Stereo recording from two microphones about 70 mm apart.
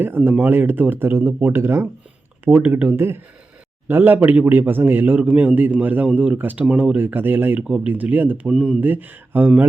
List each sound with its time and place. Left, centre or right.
0.4 s speech: right
2.4 s a man's voice: right
8.4 s speech: centre
8.8 s a man's voice: right